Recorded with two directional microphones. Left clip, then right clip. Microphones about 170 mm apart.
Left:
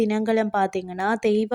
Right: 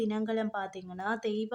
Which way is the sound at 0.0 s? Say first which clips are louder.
Left 10 dB; 45° left (ahead or behind).